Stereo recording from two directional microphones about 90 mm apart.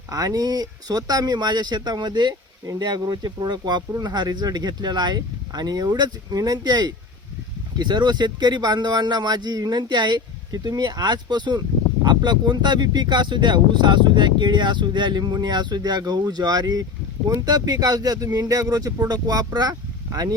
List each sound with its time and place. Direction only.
0.1 s speech: 45° right (ahead or behind)